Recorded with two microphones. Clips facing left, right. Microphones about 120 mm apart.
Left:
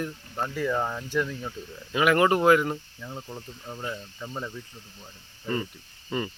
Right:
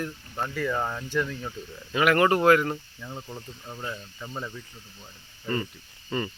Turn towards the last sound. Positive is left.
turn(degrees=5)  # may be behind; listen again after turning